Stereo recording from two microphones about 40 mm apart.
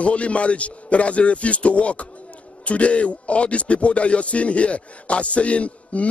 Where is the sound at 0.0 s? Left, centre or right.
Left.